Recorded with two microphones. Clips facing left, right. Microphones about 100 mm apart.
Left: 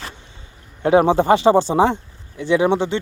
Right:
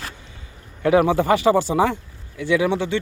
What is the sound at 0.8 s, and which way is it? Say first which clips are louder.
Speech: left 3 dB; 30° left (ahead or behind).